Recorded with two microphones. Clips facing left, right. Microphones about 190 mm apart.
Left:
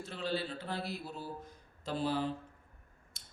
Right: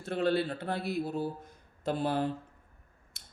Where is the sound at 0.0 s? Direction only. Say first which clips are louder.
Right 8 dB; 55° right (ahead or behind).